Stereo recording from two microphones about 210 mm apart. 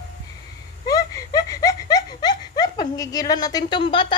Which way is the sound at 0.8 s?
15° left (ahead or behind).